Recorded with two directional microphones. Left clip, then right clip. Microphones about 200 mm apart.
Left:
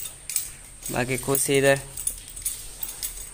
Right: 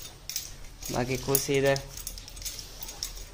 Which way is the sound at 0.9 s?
5° left (ahead or behind).